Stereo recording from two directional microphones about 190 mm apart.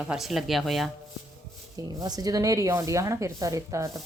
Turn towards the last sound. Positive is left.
turn(degrees=-15)  # may be behind; listen again after turning